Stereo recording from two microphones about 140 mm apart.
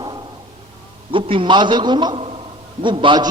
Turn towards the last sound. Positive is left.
turn(degrees=-35)  # may be behind; listen again after turning